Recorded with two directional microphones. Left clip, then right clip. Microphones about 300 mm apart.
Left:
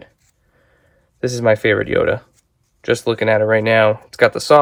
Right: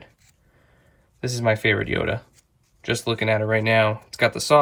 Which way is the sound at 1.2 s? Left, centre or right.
Centre.